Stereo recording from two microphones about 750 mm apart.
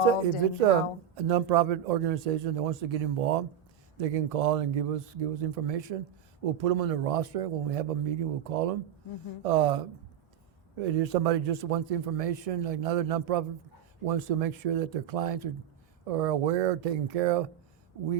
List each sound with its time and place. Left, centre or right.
1.1 s a man's voice: right